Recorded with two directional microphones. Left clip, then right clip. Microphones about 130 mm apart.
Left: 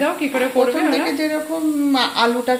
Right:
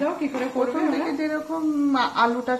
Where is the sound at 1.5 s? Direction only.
10° left (ahead or behind).